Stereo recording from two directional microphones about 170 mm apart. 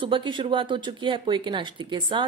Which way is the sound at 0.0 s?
30° right (ahead or behind).